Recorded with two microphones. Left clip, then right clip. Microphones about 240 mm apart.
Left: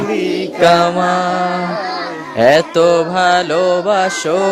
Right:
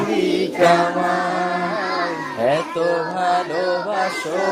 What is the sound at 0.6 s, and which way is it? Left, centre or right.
Mantra, left.